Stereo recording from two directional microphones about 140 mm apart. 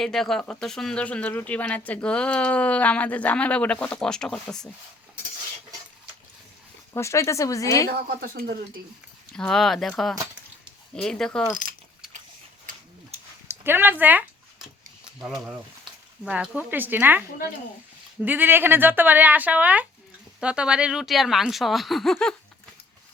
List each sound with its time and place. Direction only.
0.0 s speech: centre (ahead or behind)
6.9 s speech: 20° left (ahead or behind)
7.9 s speech: 90° right
9.3 s speech: 5° left (ahead or behind)
13.5 s a sound: 15° right (ahead or behind)
15.2 s a woman's voice: 5° right (ahead or behind)